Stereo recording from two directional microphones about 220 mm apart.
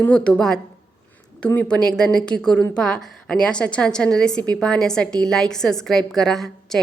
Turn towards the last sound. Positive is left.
turn(degrees=0)  # may be behind; listen again after turning